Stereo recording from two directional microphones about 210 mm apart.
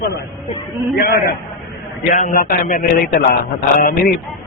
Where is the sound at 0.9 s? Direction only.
45° left (ahead or behind).